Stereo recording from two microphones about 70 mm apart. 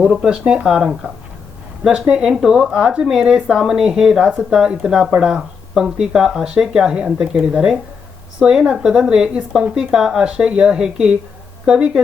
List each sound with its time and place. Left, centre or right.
0.0 s speech: centre